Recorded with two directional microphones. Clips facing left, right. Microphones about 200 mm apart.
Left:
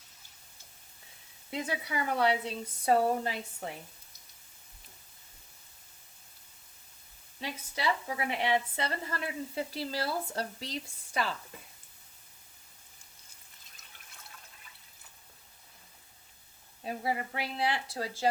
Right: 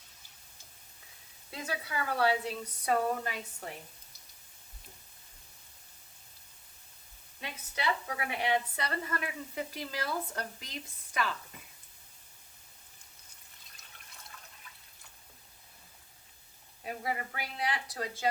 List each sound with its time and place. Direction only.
1.5 s a woman's voice: 20° left (ahead or behind)
7.4 s a woman's voice: 25° left (ahead or behind)
16.8 s a woman's voice: 30° left (ahead or behind)